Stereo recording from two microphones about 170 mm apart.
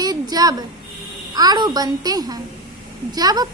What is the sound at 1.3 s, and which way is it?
A woman's voice, 25° right (ahead or behind).